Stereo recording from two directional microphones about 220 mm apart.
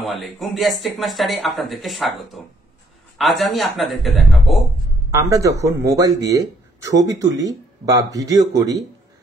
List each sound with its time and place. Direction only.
0.0 s speech: centre (ahead or behind)
5.1 s speech: 15° right (ahead or behind)